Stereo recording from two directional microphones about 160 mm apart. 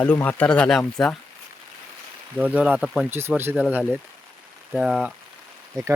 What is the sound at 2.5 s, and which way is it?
Speech, 5° right (ahead or behind).